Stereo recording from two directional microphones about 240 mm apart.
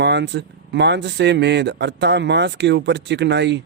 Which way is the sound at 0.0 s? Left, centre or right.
Right.